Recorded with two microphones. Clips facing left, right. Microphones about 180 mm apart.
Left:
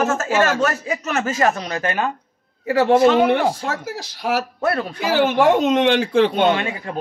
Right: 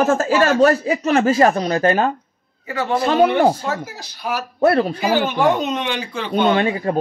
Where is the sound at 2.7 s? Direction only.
70° left (ahead or behind).